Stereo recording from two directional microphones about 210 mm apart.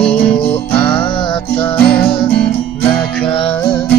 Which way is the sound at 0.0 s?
25° left (ahead or behind).